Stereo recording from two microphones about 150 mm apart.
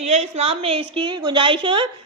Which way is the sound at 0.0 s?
45° right (ahead or behind).